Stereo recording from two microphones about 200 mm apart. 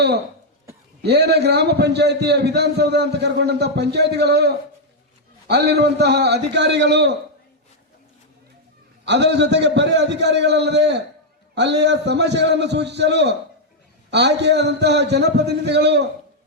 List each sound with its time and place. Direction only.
1.0 s a man's voice: 55° right (ahead or behind)
9.0 s a man's voice: 60° right (ahead or behind)